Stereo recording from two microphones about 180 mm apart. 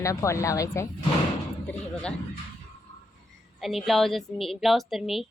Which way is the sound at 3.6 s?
Centre (ahead or behind).